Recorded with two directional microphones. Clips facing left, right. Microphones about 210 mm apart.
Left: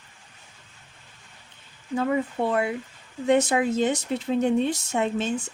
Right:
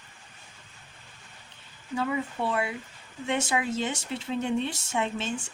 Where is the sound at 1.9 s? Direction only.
45° left (ahead or behind).